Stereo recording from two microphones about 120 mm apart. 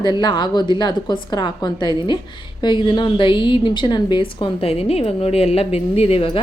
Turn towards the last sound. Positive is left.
turn(degrees=50)  # may be behind; listen again after turning